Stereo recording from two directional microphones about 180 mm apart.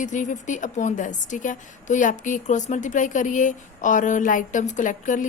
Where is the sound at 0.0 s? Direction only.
45° left (ahead or behind).